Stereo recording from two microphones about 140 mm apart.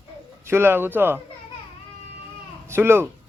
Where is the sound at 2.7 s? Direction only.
15° right (ahead or behind).